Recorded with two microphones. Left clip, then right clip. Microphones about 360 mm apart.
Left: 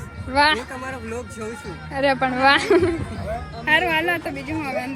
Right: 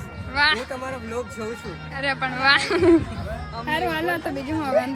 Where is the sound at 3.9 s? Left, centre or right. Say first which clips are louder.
Left 4 dB; right.